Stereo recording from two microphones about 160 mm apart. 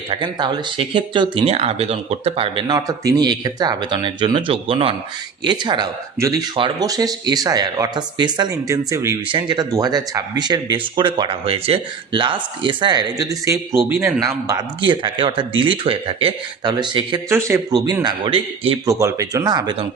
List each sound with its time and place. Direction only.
0.1 s speech: 30° right (ahead or behind)
17.2 s speech: 15° right (ahead or behind)
18.0 s speech: 35° right (ahead or behind)
18.9 s speech: 20° right (ahead or behind)